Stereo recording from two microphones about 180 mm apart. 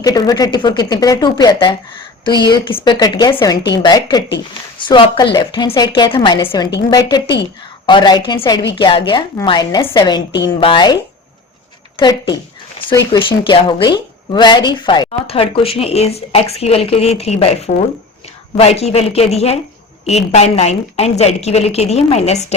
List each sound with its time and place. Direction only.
0.0 s a woman's voice: 20° left (ahead or behind)
11.9 s a woman's voice: 25° left (ahead or behind)